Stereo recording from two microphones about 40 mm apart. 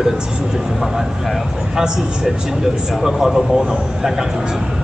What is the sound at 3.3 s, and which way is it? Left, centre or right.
Speech, centre.